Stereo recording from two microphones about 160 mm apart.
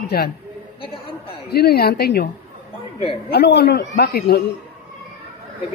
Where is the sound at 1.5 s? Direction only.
90° left.